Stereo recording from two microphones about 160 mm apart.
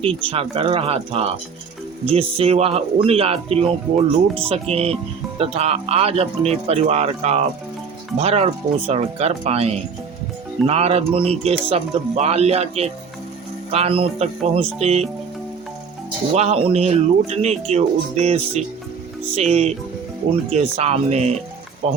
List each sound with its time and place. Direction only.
0.0 s speech: 35° right (ahead or behind)
16.3 s speech: 45° right (ahead or behind)